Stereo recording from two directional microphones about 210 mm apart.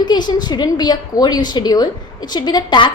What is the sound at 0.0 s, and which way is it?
A woman's voice, 20° left (ahead or behind).